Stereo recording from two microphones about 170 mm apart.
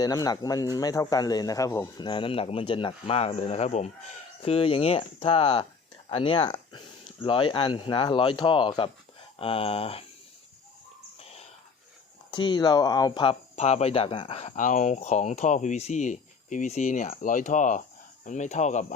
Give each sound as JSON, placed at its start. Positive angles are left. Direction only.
{"t": 0.0, "sound": "speech", "side_deg": 20}
{"t": 11.2, "sound": "a sound", "side_deg": 35}
{"t": 12.3, "sound": "speech", "side_deg": 25}
{"t": 13.6, "sound": "speech", "side_deg": 40}